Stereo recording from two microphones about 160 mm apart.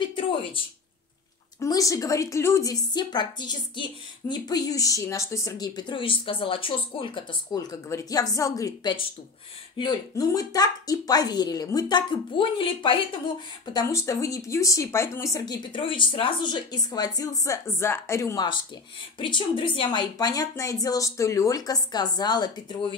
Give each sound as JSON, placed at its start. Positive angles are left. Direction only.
{"t": 0.1, "sound": "a sound", "side_deg": 35}
{"t": 1.6, "sound": "a woman's voice", "side_deg": 20}
{"t": 13.7, "sound": "a woman's voice", "side_deg": 20}